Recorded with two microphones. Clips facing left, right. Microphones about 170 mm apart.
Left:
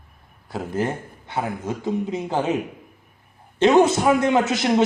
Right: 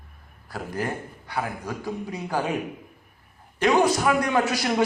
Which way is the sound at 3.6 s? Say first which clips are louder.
Left 5 dB; 25° left (ahead or behind).